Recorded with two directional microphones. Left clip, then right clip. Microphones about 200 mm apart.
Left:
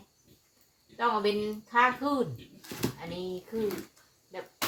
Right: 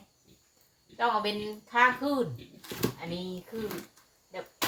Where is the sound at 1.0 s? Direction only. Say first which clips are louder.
Left 1 dB; 25° left (ahead or behind).